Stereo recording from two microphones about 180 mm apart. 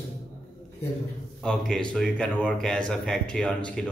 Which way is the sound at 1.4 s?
5° left (ahead or behind).